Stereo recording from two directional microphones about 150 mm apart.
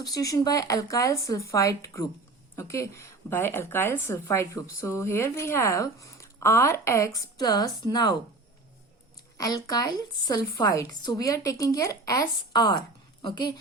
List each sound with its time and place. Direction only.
0.0 s a woman's voice: 25° left (ahead or behind)
9.4 s a woman's voice: 25° left (ahead or behind)